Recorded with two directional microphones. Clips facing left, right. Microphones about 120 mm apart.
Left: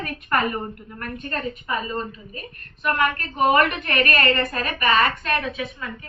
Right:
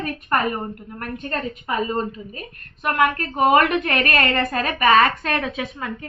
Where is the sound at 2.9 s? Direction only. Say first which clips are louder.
Right 4 dB; 90° right.